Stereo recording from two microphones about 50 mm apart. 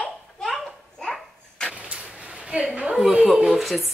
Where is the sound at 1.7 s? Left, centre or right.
Right.